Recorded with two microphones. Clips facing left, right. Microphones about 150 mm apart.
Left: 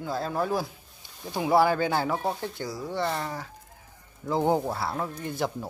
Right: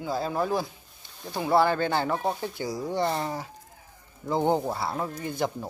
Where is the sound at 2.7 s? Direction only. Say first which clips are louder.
Right 3 dB; 15° right (ahead or behind).